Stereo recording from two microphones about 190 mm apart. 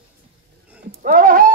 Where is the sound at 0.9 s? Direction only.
45° right (ahead or behind).